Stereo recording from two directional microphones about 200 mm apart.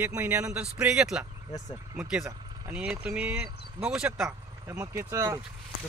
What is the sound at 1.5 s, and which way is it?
Speech, 15° left (ahead or behind).